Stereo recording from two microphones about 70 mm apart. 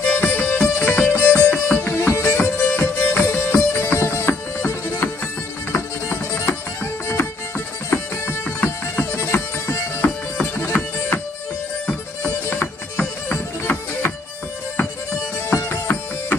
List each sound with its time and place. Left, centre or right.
0.0 s music: left
2.0 s music: left
2.4 s music: left
12.2 s music: left